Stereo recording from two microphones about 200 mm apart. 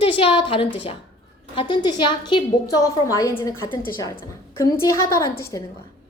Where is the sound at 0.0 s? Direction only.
25° left (ahead or behind).